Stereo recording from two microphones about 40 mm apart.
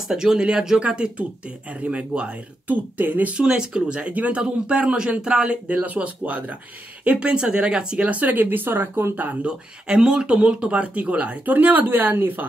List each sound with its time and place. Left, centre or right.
0.1 s speech: centre
1.7 s speech: right
2.7 s speech: right
3.3 s speech: right
4.1 s speech: right
4.4 s speech: right
5.9 s speech: right
7.2 s speech: right
8.1 s speech: right
9.1 s speech: right
9.4 s speech: right